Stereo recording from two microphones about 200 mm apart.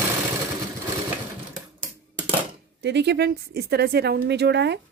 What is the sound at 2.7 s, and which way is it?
Speech, 60° right (ahead or behind).